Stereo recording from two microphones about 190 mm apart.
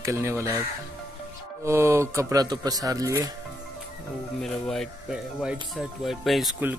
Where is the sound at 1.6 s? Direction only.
15° right (ahead or behind).